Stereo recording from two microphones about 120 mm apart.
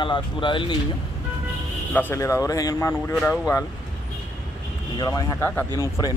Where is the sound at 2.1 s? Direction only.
25° left (ahead or behind).